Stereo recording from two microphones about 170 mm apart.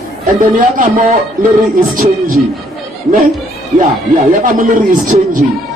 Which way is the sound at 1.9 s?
55° right (ahead or behind).